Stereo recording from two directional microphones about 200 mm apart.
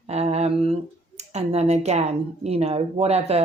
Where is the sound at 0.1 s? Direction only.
30° right (ahead or behind).